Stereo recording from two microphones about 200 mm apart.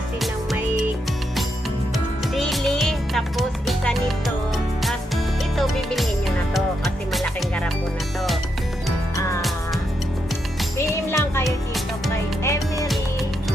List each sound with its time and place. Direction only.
2.3 s music: centre (ahead or behind)
10.8 s music: 15° left (ahead or behind)
11.4 s music: centre (ahead or behind)
12.4 s music: 15° left (ahead or behind)